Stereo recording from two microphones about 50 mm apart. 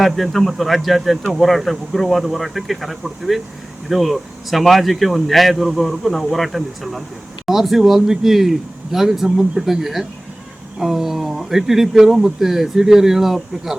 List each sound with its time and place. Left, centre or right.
0.0 s speech: centre